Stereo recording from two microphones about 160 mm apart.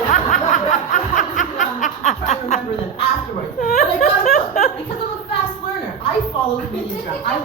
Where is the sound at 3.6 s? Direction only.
60° left (ahead or behind).